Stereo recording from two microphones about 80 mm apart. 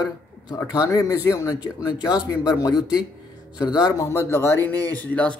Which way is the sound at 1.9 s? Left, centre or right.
Left.